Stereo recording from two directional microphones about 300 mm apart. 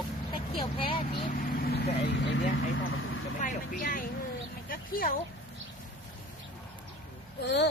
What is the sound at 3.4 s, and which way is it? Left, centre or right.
Speech, left.